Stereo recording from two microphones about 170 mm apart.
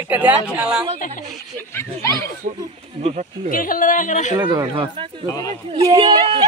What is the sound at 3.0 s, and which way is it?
Speech, 40° right (ahead or behind).